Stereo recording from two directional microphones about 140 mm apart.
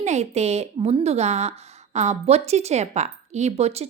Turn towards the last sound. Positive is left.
turn(degrees=-50)  # may be behind; listen again after turning